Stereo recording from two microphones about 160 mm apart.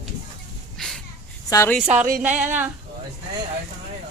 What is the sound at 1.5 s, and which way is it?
Speech, 20° left (ahead or behind).